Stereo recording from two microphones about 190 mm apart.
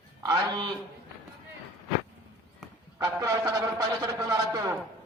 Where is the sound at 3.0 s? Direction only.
20° right (ahead or behind).